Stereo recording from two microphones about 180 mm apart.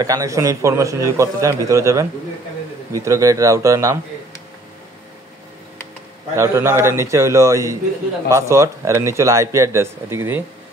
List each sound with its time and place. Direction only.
0.0 s a man's voice: 20° right (ahead or behind)
6.3 s a man's voice: 15° right (ahead or behind)